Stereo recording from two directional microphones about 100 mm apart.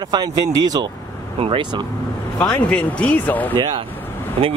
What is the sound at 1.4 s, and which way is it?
Speech, 60° right (ahead or behind).